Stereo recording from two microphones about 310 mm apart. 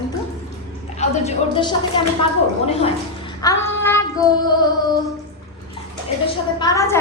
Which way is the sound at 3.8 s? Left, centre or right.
Centre.